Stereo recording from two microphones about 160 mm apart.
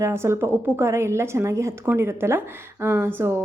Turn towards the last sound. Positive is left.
turn(degrees=-15)  # may be behind; listen again after turning